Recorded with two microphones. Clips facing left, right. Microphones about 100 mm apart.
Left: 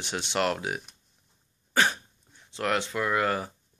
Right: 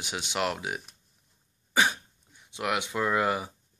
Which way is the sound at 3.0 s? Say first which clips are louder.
Right 3 dB; 20° right (ahead or behind).